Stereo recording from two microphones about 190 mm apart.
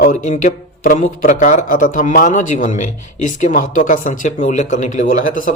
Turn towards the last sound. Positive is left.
turn(degrees=45)  # may be behind; listen again after turning